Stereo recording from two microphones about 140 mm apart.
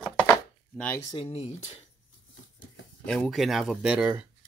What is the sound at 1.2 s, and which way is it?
Speech, 50° left (ahead or behind).